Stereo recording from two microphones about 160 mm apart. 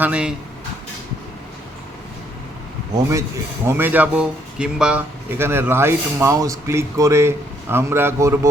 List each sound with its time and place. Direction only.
0.0 s speech: 5° right (ahead or behind)
2.9 s a man's voice: 20° right (ahead or behind)